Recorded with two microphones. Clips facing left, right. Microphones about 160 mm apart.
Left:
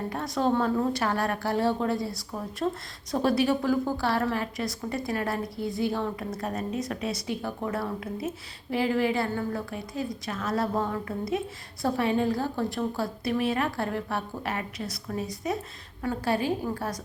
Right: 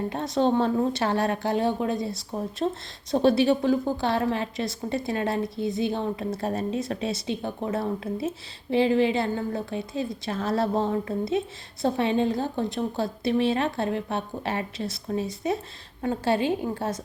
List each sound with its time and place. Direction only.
0.1 s a woman's voice: 25° right (ahead or behind)